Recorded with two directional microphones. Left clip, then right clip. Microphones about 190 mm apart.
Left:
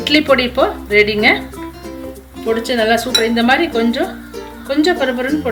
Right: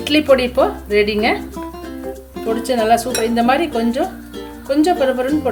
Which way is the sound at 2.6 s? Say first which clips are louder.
Right 1 dB; 30° right (ahead or behind).